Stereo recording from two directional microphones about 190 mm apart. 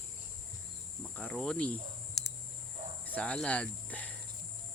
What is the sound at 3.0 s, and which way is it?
Speech, 10° left (ahead or behind).